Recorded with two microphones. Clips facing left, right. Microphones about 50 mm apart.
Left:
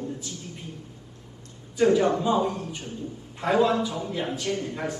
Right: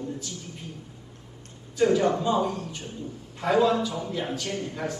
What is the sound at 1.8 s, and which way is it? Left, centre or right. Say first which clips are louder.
A man's voice: left 1 dB; left.